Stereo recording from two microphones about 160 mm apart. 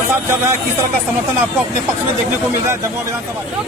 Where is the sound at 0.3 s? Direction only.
20° right (ahead or behind).